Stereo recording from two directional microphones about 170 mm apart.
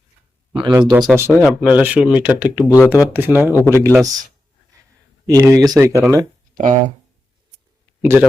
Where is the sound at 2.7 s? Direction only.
20° left (ahead or behind).